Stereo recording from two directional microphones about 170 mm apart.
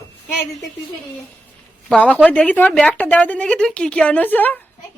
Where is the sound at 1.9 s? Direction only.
10° left (ahead or behind).